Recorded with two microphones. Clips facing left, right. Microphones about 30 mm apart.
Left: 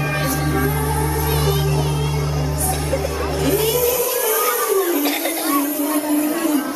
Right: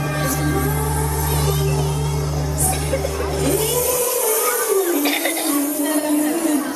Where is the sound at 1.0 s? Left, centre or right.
Centre.